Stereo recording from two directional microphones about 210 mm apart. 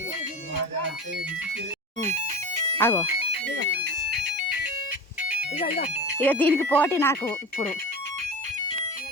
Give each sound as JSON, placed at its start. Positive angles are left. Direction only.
{"t": 2.0, "sound": "speech", "side_deg": -35}
{"t": 2.7, "sound": "speech", "side_deg": 15}
{"t": 5.2, "sound": "music", "side_deg": -5}
{"t": 6.2, "sound": "speech", "side_deg": 10}